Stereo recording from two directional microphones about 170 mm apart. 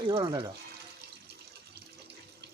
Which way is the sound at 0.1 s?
25° right (ahead or behind).